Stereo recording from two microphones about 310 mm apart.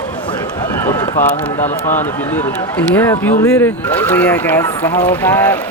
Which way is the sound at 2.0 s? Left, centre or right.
Centre.